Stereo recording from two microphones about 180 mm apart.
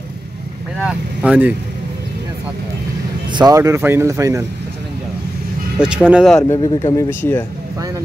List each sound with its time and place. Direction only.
0.8 s speech: 10° right (ahead or behind)
3.3 s speech: 25° right (ahead or behind)
5.8 s speech: 5° right (ahead or behind)
6.5 s speech: 20° left (ahead or behind)